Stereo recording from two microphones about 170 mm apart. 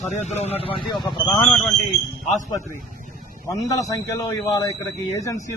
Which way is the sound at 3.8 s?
20° left (ahead or behind).